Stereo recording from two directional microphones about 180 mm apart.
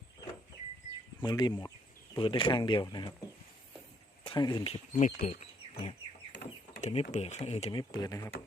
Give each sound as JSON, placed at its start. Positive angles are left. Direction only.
{"t": 1.2, "sound": "speech", "side_deg": 25}
{"t": 4.2, "sound": "speech", "side_deg": 25}
{"t": 6.3, "sound": "a sound", "side_deg": 80}
{"t": 6.8, "sound": "speech", "side_deg": 40}
{"t": 7.7, "sound": "speech", "side_deg": 25}